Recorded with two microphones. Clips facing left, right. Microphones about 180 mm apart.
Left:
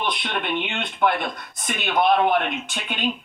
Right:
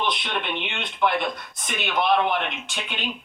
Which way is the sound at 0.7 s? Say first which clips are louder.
Even; 50° left (ahead or behind).